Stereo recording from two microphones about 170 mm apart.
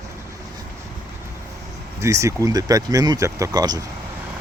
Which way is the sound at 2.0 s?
20° right (ahead or behind).